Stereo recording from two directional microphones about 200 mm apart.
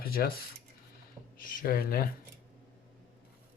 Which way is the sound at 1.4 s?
45° left (ahead or behind).